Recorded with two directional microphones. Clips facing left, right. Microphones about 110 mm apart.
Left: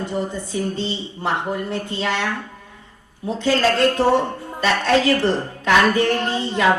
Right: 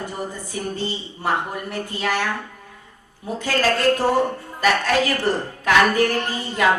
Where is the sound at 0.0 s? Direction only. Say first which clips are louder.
Left 5 dB; 20° left (ahead or behind).